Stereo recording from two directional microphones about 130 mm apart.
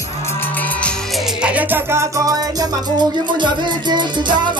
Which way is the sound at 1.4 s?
10° right (ahead or behind).